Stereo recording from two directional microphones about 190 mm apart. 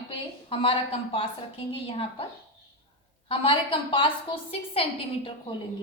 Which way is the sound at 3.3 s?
30° left (ahead or behind).